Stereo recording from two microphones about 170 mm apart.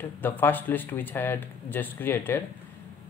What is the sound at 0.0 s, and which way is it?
Speech, 10° left (ahead or behind).